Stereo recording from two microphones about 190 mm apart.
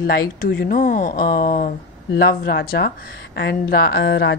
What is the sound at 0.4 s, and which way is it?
A woman's voice, 55° left (ahead or behind).